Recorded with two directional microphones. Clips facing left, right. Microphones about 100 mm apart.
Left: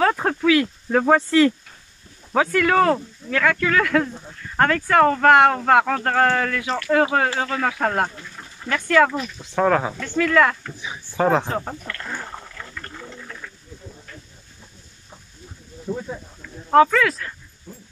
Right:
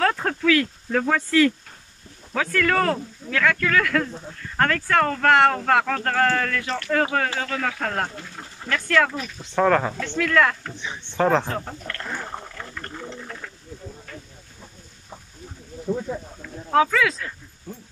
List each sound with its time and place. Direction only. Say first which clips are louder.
0.0 s speech: left 3 dB; 10° left (ahead or behind)
8.6 s speech: left 4 dB; 10° left (ahead or behind)
12.8 s sewing machine: right 2 dB; 40° right (ahead or behind)
16.7 s speech: left 4 dB; centre (ahead or behind)